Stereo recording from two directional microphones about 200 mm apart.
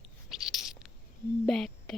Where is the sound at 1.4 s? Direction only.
Centre (ahead or behind).